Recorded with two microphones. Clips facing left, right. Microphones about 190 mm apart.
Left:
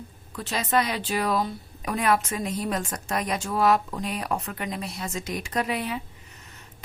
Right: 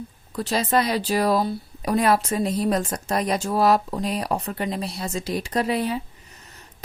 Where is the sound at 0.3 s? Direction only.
35° right (ahead or behind).